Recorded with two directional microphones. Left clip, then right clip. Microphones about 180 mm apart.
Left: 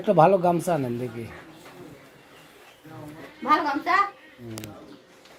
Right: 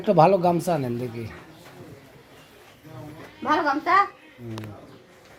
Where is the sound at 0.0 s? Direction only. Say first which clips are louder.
Right 1 dB; 5° right (ahead or behind).